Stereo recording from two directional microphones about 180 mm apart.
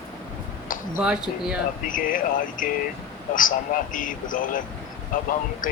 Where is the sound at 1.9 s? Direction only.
50° left (ahead or behind).